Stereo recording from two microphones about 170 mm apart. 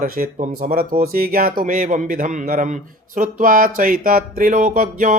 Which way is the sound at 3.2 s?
55° right (ahead or behind).